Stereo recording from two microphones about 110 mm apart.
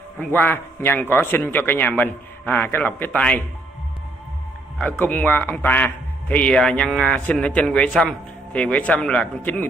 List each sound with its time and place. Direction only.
0.2 s a man's voice: 15° left (ahead or behind)
4.7 s a man's voice: 15° left (ahead or behind)